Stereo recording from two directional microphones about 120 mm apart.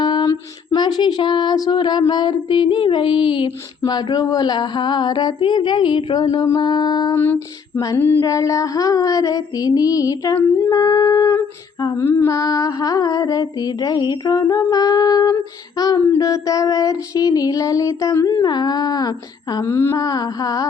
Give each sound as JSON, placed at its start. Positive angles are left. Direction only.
{"t": 0.0, "sound": "a sound", "side_deg": 40}
{"t": 0.3, "sound": "child singing", "side_deg": 35}
{"t": 7.2, "sound": "a sound", "side_deg": 15}
{"t": 8.2, "sound": "child singing", "side_deg": 30}
{"t": 11.9, "sound": "child singing", "side_deg": 20}
{"t": 19.6, "sound": "child singing", "side_deg": 20}